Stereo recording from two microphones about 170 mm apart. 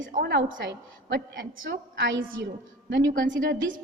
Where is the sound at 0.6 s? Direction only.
90° right.